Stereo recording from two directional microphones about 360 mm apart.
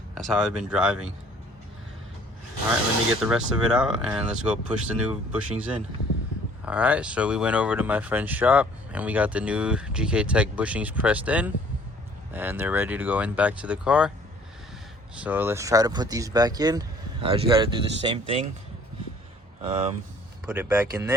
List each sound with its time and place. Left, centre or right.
0.1 s speech: centre
3.2 s speech: centre
15.1 s speech: centre
19.6 s speech: centre